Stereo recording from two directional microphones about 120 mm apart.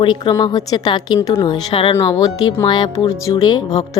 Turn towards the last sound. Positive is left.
turn(degrees=35)  # may be behind; listen again after turning